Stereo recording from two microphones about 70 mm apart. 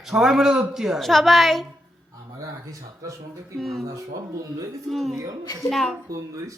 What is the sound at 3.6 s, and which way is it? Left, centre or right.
Speech, centre.